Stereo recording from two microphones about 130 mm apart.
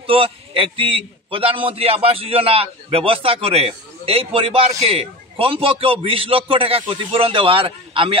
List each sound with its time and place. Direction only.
0.0 s a man's voice: 45° right (ahead or behind)